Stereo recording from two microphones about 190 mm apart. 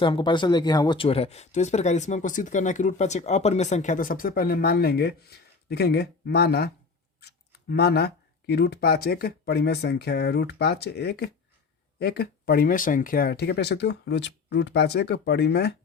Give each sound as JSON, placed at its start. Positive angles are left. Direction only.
{"t": 0.0, "sound": "speech", "side_deg": 25}